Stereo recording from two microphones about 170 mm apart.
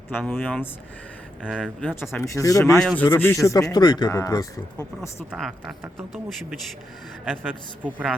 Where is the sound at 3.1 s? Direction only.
15° left (ahead or behind).